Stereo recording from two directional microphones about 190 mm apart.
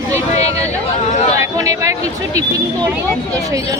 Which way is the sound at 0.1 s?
35° left (ahead or behind).